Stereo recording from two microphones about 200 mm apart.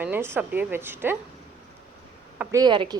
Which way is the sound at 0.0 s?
10° right (ahead or behind).